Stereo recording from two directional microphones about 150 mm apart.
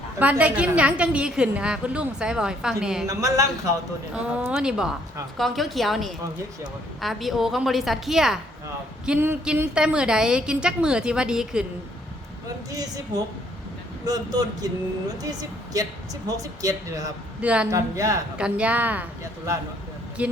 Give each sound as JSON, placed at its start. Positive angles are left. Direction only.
{"t": 0.2, "sound": "a woman's voice", "side_deg": -10}
{"t": 3.1, "sound": "speech", "side_deg": -20}
{"t": 4.1, "sound": "a woman's voice", "side_deg": -5}
{"t": 14.0, "sound": "speech", "side_deg": -25}
{"t": 17.4, "sound": "a woman's voice", "side_deg": -10}
{"t": 17.7, "sound": "speech", "side_deg": -20}
{"t": 18.3, "sound": "a woman's voice", "side_deg": -10}